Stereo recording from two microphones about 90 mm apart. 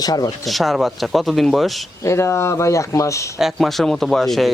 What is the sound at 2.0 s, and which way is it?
Speech, 30° left (ahead or behind).